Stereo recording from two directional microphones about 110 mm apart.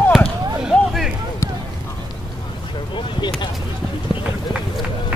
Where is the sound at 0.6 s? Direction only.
5° right (ahead or behind).